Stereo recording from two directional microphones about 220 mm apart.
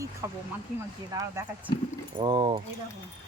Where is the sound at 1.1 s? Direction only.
15° right (ahead or behind).